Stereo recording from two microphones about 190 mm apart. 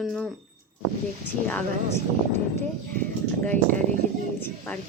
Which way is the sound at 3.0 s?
10° left (ahead or behind).